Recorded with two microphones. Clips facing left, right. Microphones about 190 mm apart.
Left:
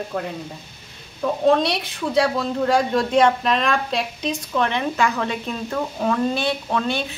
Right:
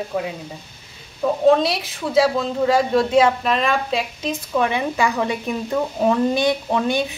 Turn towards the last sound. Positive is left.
turn(degrees=-15)  # may be behind; listen again after turning